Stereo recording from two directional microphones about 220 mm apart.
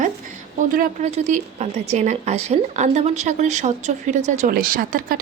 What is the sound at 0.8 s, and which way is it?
A woman's voice, 30° right (ahead or behind).